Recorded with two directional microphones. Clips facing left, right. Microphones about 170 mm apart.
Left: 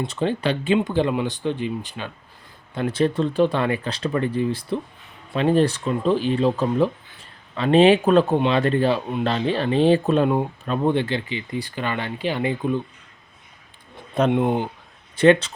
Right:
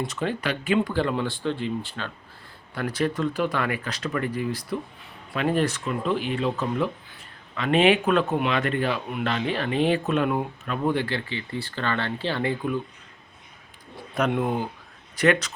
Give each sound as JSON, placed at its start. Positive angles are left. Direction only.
{"t": 0.0, "sound": "speech", "side_deg": 30}
{"t": 2.7, "sound": "a man's voice", "side_deg": 25}
{"t": 14.2, "sound": "a man's voice", "side_deg": 25}